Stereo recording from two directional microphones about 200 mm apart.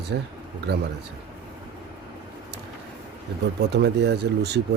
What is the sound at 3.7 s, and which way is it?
Speech, 55° right (ahead or behind).